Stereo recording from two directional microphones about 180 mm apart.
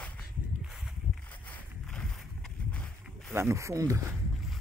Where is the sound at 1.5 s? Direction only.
5° left (ahead or behind).